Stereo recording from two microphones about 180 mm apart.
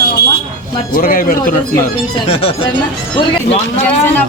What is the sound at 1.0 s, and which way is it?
Speech, 55° left (ahead or behind).